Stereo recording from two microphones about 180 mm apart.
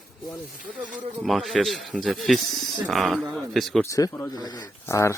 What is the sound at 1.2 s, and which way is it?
A man's voice, centre (ahead or behind).